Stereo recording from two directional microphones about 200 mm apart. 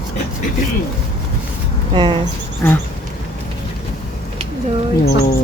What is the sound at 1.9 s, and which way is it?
Speech, 25° right (ahead or behind).